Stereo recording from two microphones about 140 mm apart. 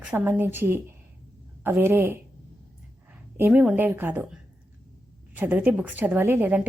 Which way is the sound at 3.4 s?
5° right (ahead or behind).